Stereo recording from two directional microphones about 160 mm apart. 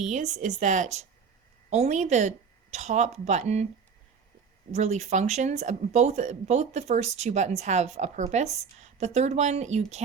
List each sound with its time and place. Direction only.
0.1 s speech: 45° right (ahead or behind)
4.7 s speech: 45° right (ahead or behind)